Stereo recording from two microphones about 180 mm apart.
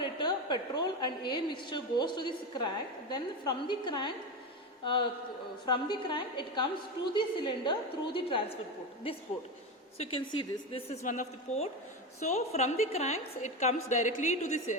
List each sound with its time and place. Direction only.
0.0 s a woman's voice: 25° left (ahead or behind)
5.6 s a woman's voice: 25° left (ahead or behind); by 14.8 s 40° left (ahead or behind)